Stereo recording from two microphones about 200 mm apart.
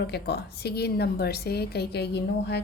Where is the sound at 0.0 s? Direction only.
55° left (ahead or behind).